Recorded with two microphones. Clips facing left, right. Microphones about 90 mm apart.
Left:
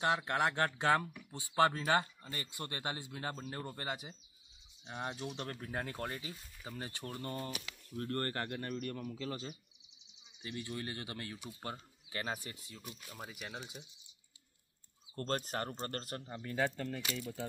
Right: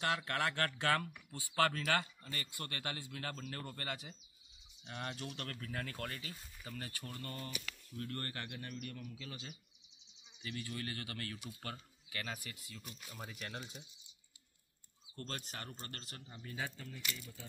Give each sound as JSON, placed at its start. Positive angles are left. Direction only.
{"t": 0.0, "sound": "speech", "side_deg": 20}
{"t": 10.4, "sound": "speech", "side_deg": 25}
{"t": 13.1, "sound": "speech", "side_deg": 5}
{"t": 15.1, "sound": "speech", "side_deg": 45}